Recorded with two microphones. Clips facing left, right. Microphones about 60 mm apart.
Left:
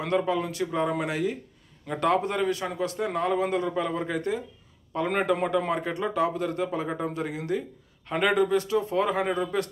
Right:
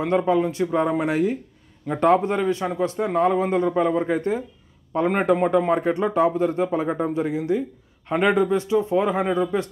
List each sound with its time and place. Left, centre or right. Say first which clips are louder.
0.0 s a man's voice: right 6 dB; right